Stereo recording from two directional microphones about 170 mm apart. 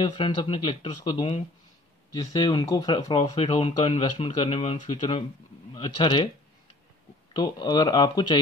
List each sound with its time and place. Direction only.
0.2 s speech: 30° left (ahead or behind)
7.3 s speech: 25° left (ahead or behind)